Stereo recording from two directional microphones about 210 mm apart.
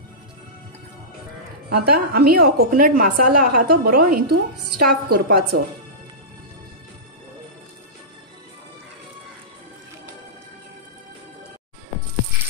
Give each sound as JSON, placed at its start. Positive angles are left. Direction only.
{"t": 1.7, "sound": "a woman's voice", "side_deg": -45}